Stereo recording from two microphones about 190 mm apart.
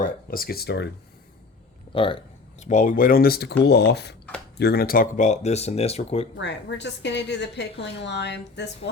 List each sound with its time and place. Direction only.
0.0 s speech: 50° left (ahead or behind)
1.9 s a woman's voice: 25° left (ahead or behind)
6.3 s a woman's voice: 65° left (ahead or behind)